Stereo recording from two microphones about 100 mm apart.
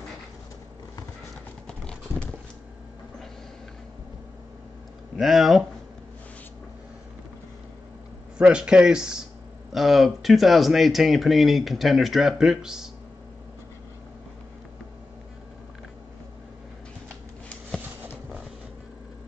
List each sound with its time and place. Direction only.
1.7 s clip-clop: 10° left (ahead or behind)
5.1 s speech: 5° right (ahead or behind)
8.4 s speech: 10° right (ahead or behind)
17.8 s a sound: 15° right (ahead or behind)